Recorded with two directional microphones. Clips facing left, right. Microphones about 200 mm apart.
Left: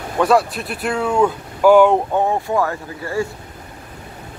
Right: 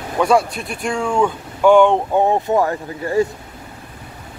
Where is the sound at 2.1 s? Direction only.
20° right (ahead or behind).